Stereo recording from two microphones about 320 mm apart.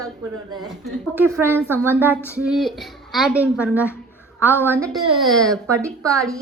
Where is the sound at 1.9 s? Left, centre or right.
Centre.